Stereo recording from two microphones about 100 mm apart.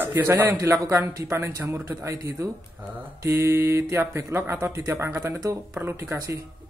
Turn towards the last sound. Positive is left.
turn(degrees=-25)  # may be behind; listen again after turning